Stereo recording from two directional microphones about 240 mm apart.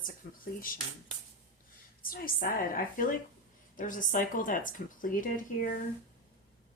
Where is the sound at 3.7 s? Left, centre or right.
Left.